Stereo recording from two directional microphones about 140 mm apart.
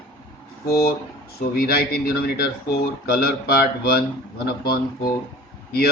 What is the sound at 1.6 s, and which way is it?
A man's voice, 90° left.